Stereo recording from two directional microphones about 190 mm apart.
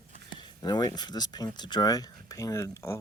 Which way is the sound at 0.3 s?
20° left (ahead or behind).